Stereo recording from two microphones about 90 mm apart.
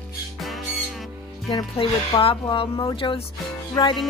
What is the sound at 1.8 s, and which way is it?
Speech, 85° left.